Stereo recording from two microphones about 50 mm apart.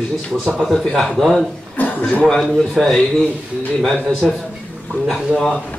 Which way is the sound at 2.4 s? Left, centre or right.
Centre.